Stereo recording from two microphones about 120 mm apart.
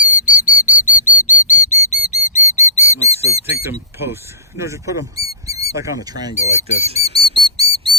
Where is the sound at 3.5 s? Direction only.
20° right (ahead or behind).